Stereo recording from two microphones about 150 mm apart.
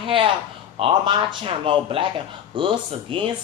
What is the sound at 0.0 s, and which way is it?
Speech, 35° right (ahead or behind).